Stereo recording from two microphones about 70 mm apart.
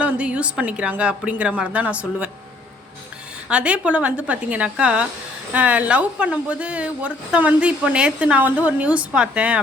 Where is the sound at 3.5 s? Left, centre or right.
Centre.